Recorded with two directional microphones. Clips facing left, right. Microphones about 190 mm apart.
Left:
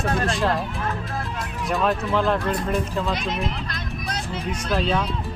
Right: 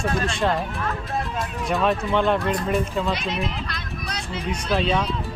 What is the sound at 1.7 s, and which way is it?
Speech, centre (ahead or behind).